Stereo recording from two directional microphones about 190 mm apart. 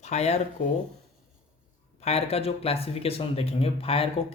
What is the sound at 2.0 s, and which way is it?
Speech, 35° left (ahead or behind).